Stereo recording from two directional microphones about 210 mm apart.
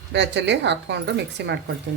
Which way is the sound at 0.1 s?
55° right (ahead or behind).